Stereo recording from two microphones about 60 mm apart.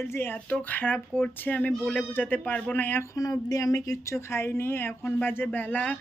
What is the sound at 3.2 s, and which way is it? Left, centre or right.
Speech, left.